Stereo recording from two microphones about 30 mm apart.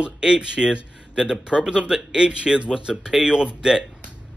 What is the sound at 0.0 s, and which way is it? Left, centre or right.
A man's voice, right.